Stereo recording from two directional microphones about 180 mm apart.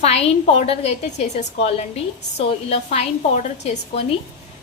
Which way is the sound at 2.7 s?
35° left (ahead or behind).